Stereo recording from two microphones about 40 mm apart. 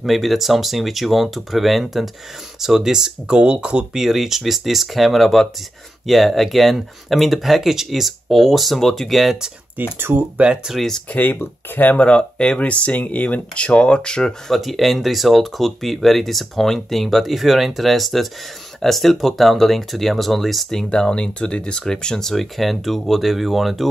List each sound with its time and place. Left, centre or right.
0.0 s speech: centre
2.6 s speech: centre
3.9 s speech: centre
9.9 s speech: right
10.3 s speech: right
11.1 s speech: left
11.7 s speech: left
12.0 s speech: left
13.7 s speech: left
14.5 s speech: centre
20.9 s speech: left
22.3 s speech: centre